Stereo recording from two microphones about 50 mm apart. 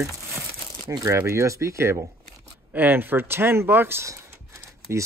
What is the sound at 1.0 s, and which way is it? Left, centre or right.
Speech, right.